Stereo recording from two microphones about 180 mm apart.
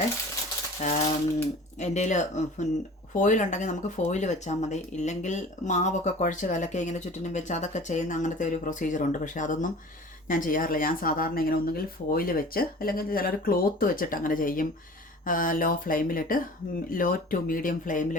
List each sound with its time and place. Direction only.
0.8 s speech: 40° left (ahead or behind)